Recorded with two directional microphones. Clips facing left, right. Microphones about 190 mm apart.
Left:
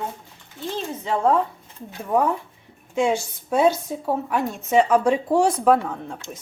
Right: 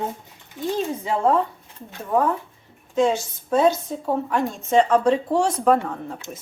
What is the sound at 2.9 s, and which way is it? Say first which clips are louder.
A woman's voice: right 1 dB; 10° left (ahead or behind).